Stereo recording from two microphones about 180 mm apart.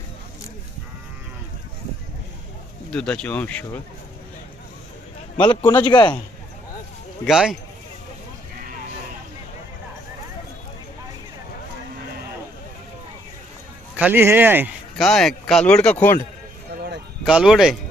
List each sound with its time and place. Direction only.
2.9 s speech: 5° left (ahead or behind)
5.5 s a man's voice: 25° left (ahead or behind)
7.3 s speech: centre (ahead or behind)
13.9 s speech: 10° right (ahead or behind)
14.9 s speech: centre (ahead or behind)
17.2 s speech: 5° right (ahead or behind)